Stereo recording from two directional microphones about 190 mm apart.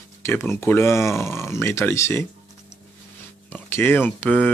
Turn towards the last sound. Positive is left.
turn(degrees=5)  # may be behind; listen again after turning